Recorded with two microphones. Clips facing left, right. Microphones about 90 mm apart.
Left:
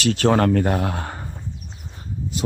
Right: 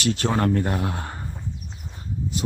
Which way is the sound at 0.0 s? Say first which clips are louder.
Left 5 dB; 90° left.